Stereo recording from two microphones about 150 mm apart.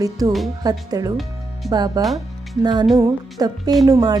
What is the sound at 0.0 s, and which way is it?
Speech, 25° right (ahead or behind).